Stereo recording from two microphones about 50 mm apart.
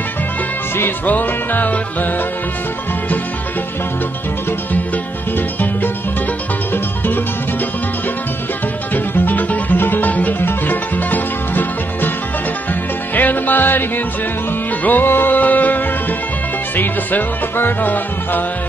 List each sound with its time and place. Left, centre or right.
1.0 s music: left
8.9 s music: left
13.1 s music: left